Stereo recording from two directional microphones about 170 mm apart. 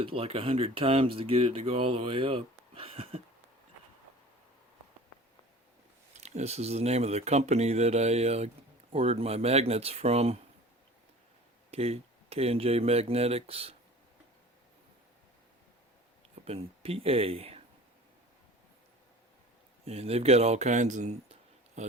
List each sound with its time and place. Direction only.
0.0 s speech: 30° right (ahead or behind)
6.1 s speech: 40° right (ahead or behind)
11.7 s speech: 35° right (ahead or behind)
16.5 s speech: 35° right (ahead or behind)
19.8 s speech: 35° right (ahead or behind)